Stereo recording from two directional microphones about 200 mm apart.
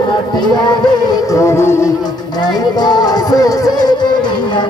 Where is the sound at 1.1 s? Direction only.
15° left (ahead or behind).